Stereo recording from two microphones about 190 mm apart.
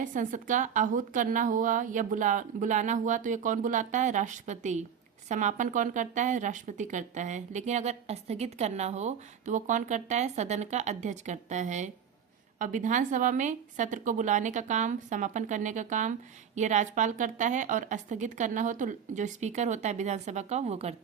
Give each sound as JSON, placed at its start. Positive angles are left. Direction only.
{"t": 0.0, "sound": "a woman's voice", "side_deg": -45}